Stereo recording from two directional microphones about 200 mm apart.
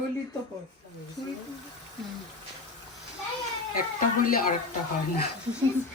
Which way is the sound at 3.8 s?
45° left (ahead or behind).